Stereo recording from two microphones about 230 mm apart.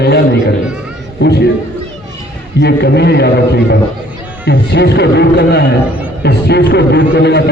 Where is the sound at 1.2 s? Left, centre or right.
Left.